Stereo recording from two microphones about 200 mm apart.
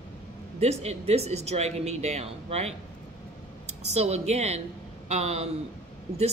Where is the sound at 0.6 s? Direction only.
30° right (ahead or behind).